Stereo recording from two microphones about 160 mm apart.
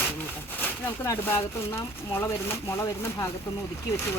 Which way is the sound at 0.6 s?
15° left (ahead or behind).